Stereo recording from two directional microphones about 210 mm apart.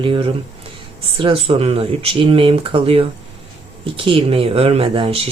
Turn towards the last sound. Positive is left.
turn(degrees=-25)  # may be behind; listen again after turning